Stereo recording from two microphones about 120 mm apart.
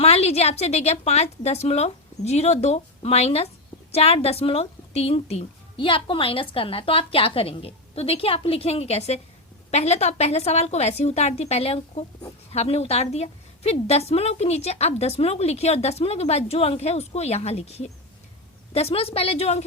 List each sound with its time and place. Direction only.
0.0 s a woman's voice: 60° left (ahead or behind)